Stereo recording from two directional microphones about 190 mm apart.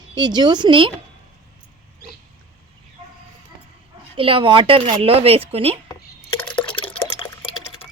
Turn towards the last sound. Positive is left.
turn(degrees=25)  # may be behind; listen again after turning